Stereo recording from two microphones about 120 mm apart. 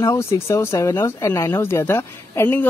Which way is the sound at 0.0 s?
25° left (ahead or behind).